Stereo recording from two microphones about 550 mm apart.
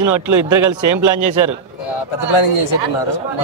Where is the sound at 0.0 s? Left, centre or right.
Right.